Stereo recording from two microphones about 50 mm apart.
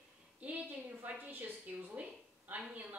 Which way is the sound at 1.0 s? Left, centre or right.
Right.